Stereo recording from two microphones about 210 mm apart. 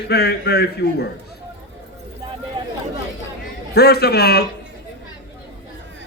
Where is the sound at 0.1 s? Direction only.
50° left (ahead or behind).